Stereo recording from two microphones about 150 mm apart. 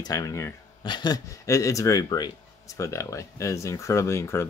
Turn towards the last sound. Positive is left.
turn(degrees=20)  # may be behind; listen again after turning